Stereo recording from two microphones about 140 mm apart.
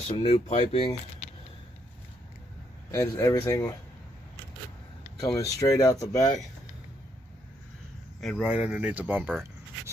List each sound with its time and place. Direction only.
0.1 s speech: 45° left (ahead or behind)
2.9 s speech: 20° left (ahead or behind)
5.2 s speech: 25° left (ahead or behind)
8.2 s speech: centre (ahead or behind)